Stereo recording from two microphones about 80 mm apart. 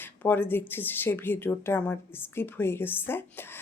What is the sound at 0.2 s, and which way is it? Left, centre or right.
Speech, left.